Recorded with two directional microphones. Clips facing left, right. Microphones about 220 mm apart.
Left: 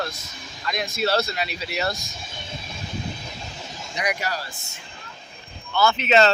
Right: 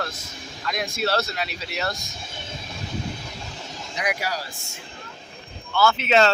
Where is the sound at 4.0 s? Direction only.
5° right (ahead or behind).